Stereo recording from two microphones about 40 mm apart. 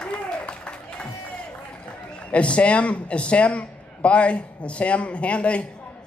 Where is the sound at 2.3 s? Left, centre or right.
Left.